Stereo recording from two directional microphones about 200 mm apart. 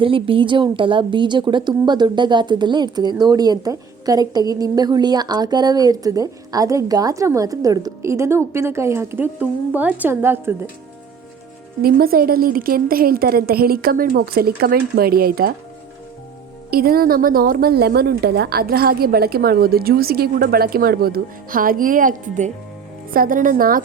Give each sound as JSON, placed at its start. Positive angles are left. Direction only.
{"t": 0.0, "sound": "a woman's voice", "side_deg": -25}
{"t": 11.8, "sound": "a woman's voice", "side_deg": -50}
{"t": 16.7, "sound": "a woman's voice", "side_deg": -50}